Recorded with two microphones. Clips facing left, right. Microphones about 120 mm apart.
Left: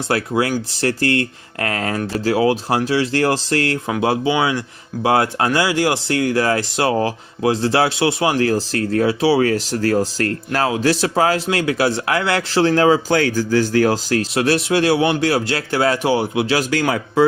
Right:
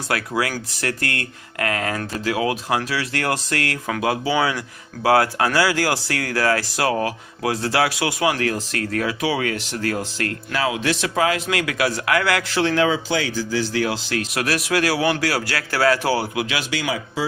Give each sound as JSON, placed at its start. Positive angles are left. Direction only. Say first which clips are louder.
{"t": 0.1, "sound": "a man's voice", "louder": "left 5 dB", "side_deg": 25}
{"t": 14.3, "sound": "a man's voice", "louder": "left 4 dB", "side_deg": 30}